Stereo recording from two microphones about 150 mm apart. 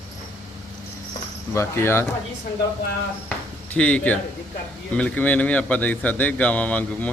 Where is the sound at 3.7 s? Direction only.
10° left (ahead or behind).